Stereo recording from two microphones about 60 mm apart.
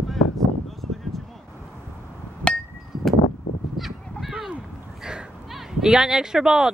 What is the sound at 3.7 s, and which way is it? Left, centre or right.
Honk, centre.